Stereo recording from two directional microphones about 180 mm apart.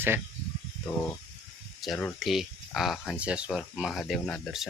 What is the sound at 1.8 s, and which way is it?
Speech, centre (ahead or behind).